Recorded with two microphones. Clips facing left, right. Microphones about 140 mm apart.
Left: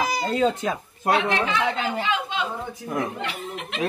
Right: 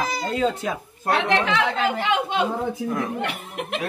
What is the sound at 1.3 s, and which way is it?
Speech, 80° right.